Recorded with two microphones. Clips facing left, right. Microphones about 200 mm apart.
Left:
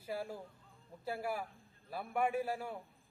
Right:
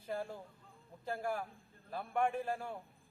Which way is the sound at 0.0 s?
10° left (ahead or behind).